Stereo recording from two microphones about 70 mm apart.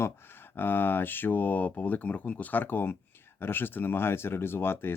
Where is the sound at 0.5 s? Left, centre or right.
Left.